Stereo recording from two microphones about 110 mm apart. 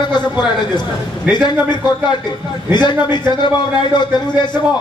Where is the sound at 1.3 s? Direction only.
40° left (ahead or behind).